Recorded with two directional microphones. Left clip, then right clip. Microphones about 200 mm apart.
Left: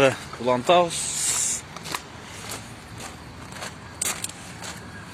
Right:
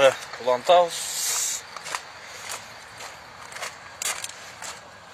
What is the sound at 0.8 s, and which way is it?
Speech, 25° right (ahead or behind).